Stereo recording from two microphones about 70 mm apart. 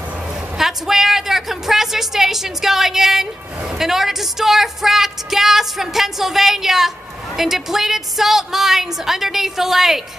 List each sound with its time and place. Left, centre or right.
0.6 s a woman's voice: centre